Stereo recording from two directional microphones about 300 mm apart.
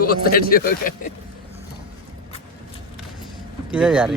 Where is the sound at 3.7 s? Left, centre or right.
Centre.